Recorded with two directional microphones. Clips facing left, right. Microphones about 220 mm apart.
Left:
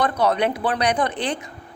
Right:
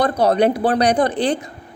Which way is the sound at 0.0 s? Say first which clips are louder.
Right 5 dB; 35° right (ahead or behind).